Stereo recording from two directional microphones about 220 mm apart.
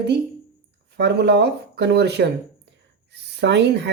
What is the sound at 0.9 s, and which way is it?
Speech, 50° right (ahead or behind).